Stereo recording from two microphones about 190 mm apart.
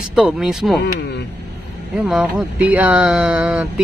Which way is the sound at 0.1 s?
Centre (ahead or behind).